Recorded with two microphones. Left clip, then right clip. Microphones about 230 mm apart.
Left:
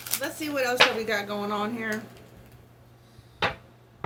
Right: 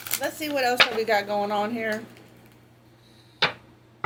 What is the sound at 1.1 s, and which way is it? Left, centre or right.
Speech, left.